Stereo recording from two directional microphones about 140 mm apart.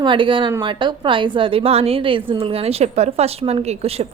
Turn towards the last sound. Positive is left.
turn(degrees=-45)  # may be behind; listen again after turning